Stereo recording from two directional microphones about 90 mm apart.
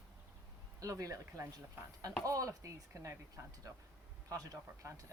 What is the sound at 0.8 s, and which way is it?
Speech, 40° right (ahead or behind).